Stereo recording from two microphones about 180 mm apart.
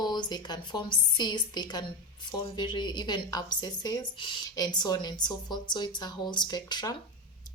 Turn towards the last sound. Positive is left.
turn(degrees=20)  # may be behind; listen again after turning